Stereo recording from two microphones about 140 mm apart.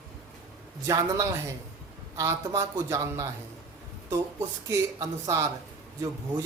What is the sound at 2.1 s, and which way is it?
Speech, 25° right (ahead or behind).